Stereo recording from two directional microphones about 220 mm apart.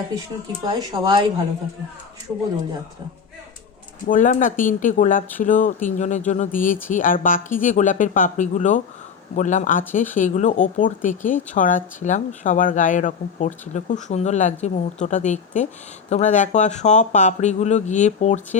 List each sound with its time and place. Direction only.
0.6 s speech: 20° right (ahead or behind)
4.0 s speech: 35° left (ahead or behind)